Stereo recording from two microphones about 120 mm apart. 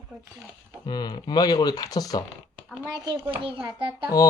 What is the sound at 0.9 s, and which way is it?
Speech, 35° left (ahead or behind).